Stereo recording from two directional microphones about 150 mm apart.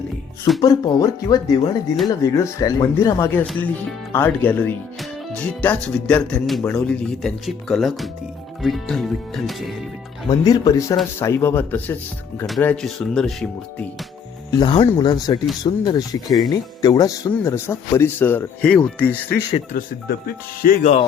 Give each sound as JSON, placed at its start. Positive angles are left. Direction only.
{"t": 0.6, "sound": "speech", "side_deg": 25}
{"t": 10.2, "sound": "speech", "side_deg": 25}
{"t": 14.5, "sound": "speech", "side_deg": 30}
{"t": 19.7, "sound": "speech", "side_deg": 85}